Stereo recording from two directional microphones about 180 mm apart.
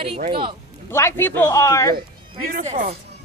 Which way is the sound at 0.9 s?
15° left (ahead or behind).